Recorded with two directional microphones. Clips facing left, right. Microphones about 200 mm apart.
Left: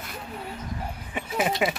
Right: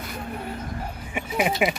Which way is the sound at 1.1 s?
15° right (ahead or behind).